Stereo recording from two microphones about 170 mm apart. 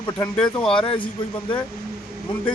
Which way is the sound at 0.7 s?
30° left (ahead or behind).